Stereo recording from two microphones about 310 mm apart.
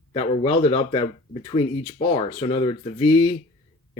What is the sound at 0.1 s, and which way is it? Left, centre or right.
Speech, centre.